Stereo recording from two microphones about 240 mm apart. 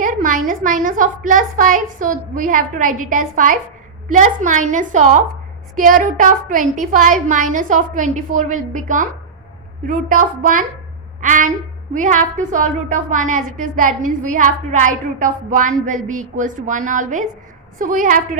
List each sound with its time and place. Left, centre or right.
0.0 s a woman's voice: right